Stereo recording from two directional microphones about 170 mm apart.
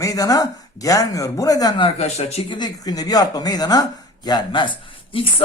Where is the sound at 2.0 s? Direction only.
40° left (ahead or behind).